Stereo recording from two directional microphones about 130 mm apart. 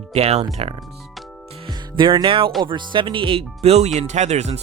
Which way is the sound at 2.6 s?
35° right (ahead or behind).